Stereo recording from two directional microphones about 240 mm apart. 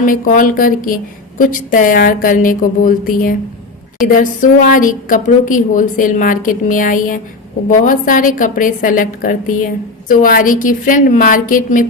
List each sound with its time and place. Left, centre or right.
0.0 s speech: left